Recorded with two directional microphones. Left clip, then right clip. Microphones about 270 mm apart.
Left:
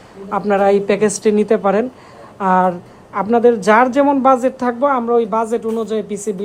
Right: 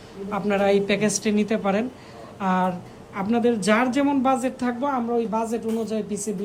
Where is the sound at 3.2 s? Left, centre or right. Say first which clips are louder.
Left 10 dB; centre.